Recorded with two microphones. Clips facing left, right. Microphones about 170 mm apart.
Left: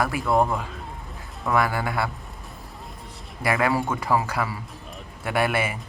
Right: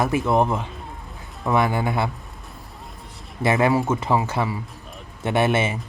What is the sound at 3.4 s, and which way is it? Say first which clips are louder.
Speech: right 4 dB; 25° right (ahead or behind).